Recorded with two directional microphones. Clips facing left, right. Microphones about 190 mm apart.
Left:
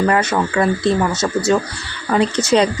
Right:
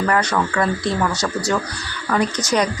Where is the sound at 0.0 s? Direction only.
25° left (ahead or behind).